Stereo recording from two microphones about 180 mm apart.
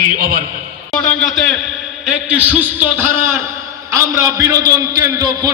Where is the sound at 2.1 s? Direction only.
10° right (ahead or behind).